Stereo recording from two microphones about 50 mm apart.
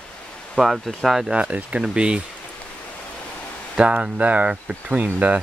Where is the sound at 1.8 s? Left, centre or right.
Centre.